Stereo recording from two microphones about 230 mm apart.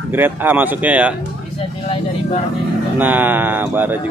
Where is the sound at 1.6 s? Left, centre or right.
Left.